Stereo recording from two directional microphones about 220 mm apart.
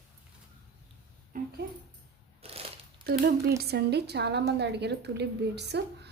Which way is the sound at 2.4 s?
25° right (ahead or behind).